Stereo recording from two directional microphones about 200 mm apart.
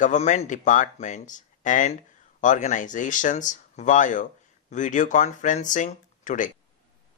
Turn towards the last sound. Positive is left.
turn(degrees=40)  # may be behind; listen again after turning